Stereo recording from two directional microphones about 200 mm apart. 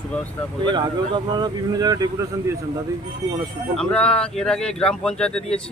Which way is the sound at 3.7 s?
5° left (ahead or behind).